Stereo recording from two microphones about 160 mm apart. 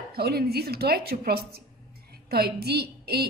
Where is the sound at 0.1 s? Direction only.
75° right (ahead or behind).